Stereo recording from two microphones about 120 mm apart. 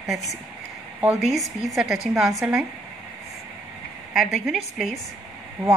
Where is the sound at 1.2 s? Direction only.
Centre (ahead or behind).